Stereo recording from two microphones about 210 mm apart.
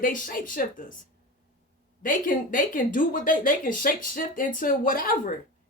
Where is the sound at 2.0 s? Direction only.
40° left (ahead or behind).